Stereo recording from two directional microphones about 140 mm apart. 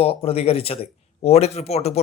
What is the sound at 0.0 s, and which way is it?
A man's voice, 45° left (ahead or behind).